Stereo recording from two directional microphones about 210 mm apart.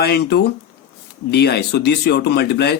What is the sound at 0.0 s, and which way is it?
Speech, 50° left (ahead or behind).